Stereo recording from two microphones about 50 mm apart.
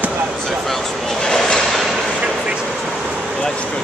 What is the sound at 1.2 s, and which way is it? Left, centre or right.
Train, centre.